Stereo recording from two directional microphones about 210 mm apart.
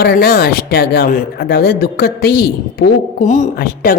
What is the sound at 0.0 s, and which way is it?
A woman's voice, 50° left (ahead or behind).